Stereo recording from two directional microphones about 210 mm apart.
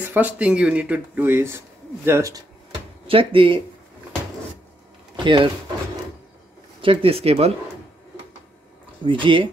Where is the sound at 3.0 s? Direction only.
25° right (ahead or behind).